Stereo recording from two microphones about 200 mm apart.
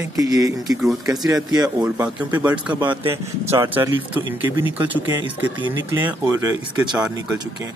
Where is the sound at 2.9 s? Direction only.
30° right (ahead or behind).